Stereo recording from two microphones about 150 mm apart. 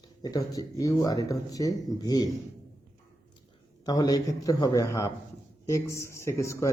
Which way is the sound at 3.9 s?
25° left (ahead or behind).